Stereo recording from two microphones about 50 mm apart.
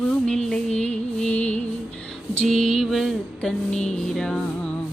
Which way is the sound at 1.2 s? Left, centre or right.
Left.